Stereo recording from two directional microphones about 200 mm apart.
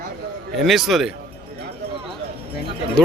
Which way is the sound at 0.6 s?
Centre (ahead or behind).